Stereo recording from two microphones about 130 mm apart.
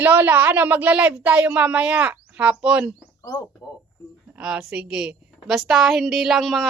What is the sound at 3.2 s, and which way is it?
Speech, 20° left (ahead or behind).